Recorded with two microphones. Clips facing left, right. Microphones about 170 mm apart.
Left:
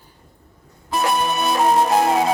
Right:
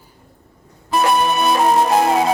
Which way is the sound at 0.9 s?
70° right (ahead or behind).